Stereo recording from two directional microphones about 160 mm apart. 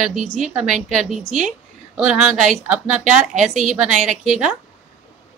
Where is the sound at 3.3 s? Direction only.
50° right (ahead or behind).